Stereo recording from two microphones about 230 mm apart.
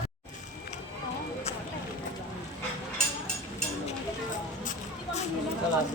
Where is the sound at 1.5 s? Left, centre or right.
Left.